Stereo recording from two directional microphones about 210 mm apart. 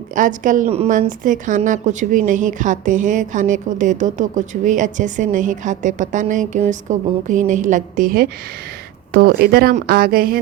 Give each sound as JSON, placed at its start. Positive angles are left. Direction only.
{"t": 0.1, "sound": "a woman's voice", "side_deg": -40}